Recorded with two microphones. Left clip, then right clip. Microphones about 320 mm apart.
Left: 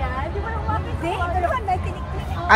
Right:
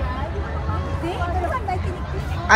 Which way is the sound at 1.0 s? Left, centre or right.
Left.